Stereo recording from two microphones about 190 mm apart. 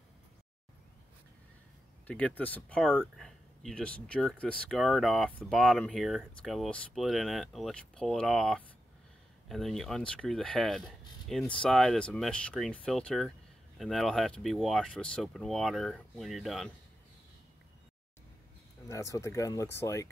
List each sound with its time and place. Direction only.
2.0 s speech: 5° left (ahead or behind)
18.9 s speech: 15° left (ahead or behind)